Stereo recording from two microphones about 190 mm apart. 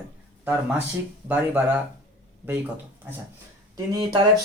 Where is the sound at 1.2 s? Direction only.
10° right (ahead or behind).